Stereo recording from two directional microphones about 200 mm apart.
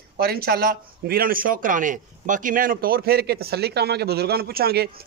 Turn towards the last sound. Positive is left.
turn(degrees=-50)  # may be behind; listen again after turning